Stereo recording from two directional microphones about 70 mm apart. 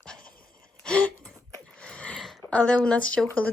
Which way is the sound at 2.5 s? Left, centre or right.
Centre.